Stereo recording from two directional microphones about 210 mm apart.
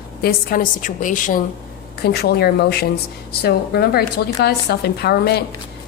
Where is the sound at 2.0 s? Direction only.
50° left (ahead or behind).